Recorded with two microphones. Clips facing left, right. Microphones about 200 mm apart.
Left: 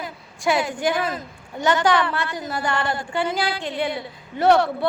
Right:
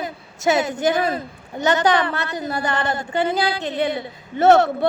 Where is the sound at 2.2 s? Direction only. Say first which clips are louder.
Right 2 dB; 20° right (ahead or behind).